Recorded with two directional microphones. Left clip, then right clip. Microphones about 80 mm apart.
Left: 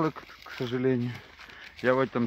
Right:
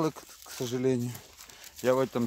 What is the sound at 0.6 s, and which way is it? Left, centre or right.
Speech, centre.